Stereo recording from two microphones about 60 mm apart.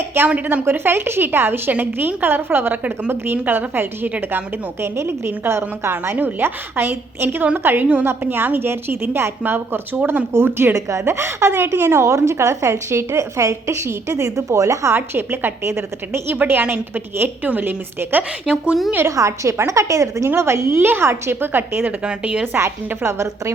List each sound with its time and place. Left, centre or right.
0.3 s a woman's voice: right
0.6 s a woman's voice: right
3.3 s a woman's voice: right
4.8 s a woman's voice: right
6.1 s a woman's voice: right
10.8 s a woman's voice: right
11.0 s a woman's voice: right
14.9 s a woman's voice: right
16.3 s a woman's voice: right
18.2 s speech: centre
19.0 s a woman's voice: right
21.8 s a woman's voice: right
22.5 s a woman's voice: right